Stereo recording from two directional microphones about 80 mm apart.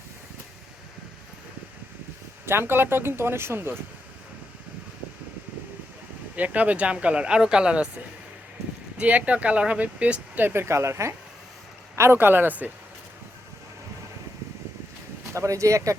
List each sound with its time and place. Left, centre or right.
2.5 s speech: right
6.3 s speech: centre
9.0 s speech: centre
15.3 s speech: right